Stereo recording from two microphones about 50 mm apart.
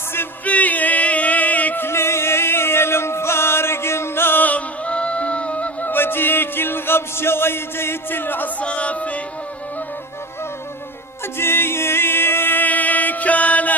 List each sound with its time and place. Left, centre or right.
0.4 s music: left
1.8 s music: left
4.4 s music: left
5.9 s music: left
8.6 s music: left
11.3 s music: left